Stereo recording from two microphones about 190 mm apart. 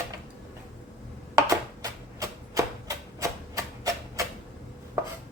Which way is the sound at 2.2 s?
15° right (ahead or behind).